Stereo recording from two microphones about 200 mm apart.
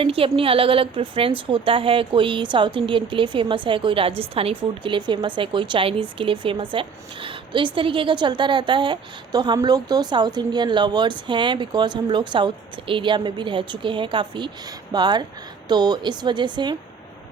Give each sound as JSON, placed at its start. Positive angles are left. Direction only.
{"t": 0.0, "sound": "a woman's voice", "side_deg": -25}